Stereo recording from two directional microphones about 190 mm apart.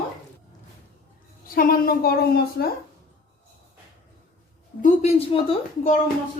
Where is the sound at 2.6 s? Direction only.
65° left (ahead or behind).